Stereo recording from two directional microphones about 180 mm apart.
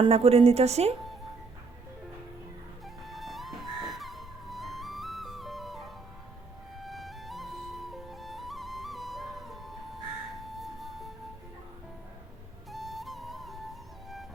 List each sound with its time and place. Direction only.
0.0 s a woman's voice: 35° right (ahead or behind)
2.8 s music: centre (ahead or behind)
12.7 s music: centre (ahead or behind)